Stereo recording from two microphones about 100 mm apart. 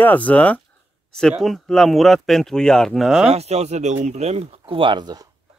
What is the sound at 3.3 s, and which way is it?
Speech, 90° right.